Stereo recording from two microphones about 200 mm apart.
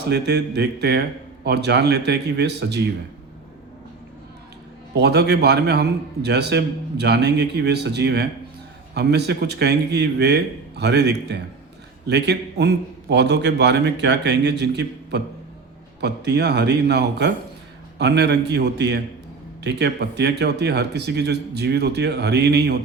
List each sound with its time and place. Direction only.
0.1 s a man's voice: 60° right (ahead or behind)
4.9 s a man's voice: 55° right (ahead or behind)